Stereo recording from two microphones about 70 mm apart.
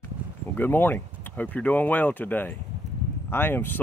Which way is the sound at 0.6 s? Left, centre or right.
Left.